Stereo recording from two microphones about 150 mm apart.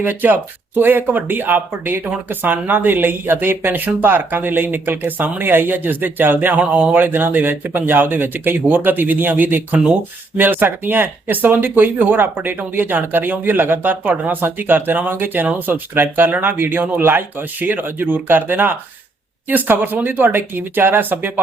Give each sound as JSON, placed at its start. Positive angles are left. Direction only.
{"t": 0.0, "sound": "speech", "side_deg": -15}